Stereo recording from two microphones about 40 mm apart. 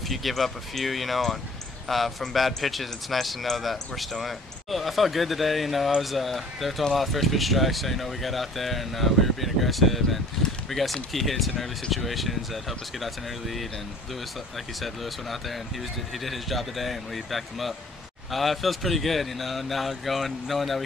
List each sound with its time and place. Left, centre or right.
0.1 s speech: centre
14.8 s speech: centre